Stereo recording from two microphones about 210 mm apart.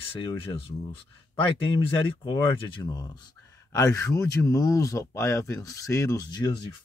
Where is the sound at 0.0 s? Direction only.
25° left (ahead or behind).